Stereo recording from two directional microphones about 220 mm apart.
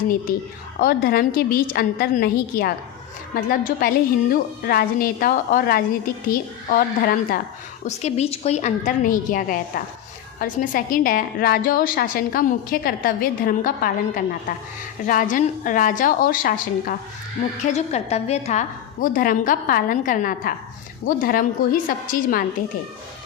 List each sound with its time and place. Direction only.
0.8 s a woman's voice: 45° left (ahead or behind)
7.9 s a woman's voice: 30° left (ahead or behind)
15.0 s a woman's voice: 35° left (ahead or behind)